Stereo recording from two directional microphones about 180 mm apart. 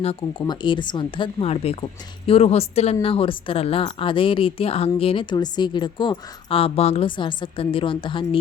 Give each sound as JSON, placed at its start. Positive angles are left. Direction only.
{"t": 0.0, "sound": "a woman's voice", "side_deg": 30}